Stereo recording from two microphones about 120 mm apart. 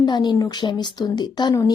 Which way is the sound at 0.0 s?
35° left (ahead or behind).